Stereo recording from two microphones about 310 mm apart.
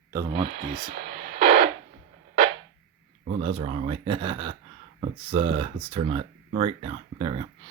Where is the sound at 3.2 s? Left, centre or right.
Centre.